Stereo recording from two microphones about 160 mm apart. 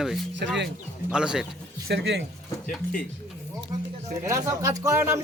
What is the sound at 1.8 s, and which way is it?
Speech, 90° right.